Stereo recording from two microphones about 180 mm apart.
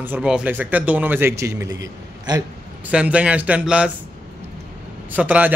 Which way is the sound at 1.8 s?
20° right (ahead or behind).